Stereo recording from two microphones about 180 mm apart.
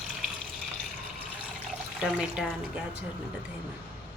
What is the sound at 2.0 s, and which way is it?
Speech, 5° right (ahead or behind).